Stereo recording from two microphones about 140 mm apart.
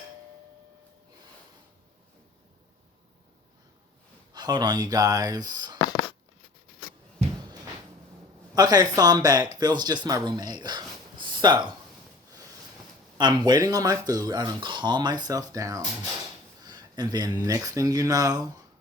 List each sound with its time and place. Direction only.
4.4 s speech: 30° right (ahead or behind)
8.5 s speech: 30° right (ahead or behind)
13.1 s speech: 30° right (ahead or behind)